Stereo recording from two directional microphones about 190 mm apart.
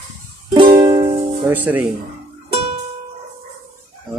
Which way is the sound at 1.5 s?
10° right (ahead or behind).